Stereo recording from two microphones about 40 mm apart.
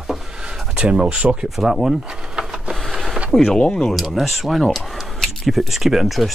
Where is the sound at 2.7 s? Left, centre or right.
Centre.